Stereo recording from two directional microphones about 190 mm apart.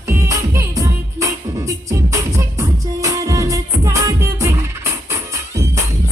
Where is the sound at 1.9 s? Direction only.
15° right (ahead or behind).